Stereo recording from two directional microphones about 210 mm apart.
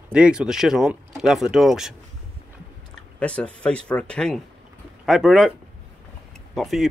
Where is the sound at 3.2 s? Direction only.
5° left (ahead or behind).